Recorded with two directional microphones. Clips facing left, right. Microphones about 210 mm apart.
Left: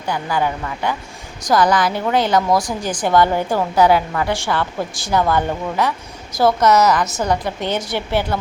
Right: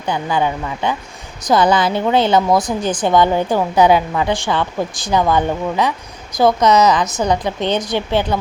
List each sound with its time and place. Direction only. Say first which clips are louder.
0.1 s a woman's voice: right 2 dB; 20° right (ahead or behind)